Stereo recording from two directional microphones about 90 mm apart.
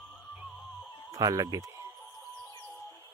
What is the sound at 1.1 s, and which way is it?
Speech, 40° right (ahead or behind).